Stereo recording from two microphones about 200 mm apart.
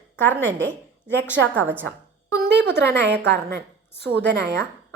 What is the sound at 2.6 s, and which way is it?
A woman's voice, 55° right (ahead or behind).